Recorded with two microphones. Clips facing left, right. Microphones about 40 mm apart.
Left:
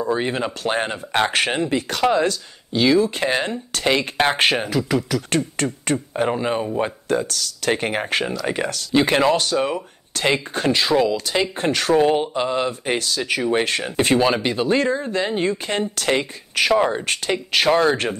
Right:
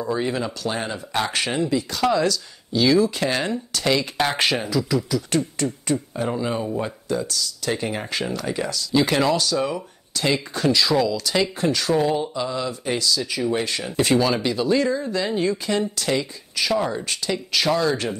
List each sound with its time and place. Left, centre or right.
0.1 s speech: left
2.0 s speech: left
3.7 s speech: left
8.9 s speech: left
11.6 s speech: left